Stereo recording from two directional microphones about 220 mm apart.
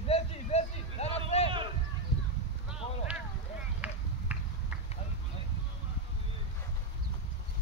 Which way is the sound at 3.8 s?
5° right (ahead or behind).